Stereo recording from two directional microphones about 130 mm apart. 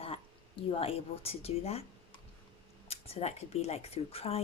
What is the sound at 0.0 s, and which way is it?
Speech, 45° left (ahead or behind).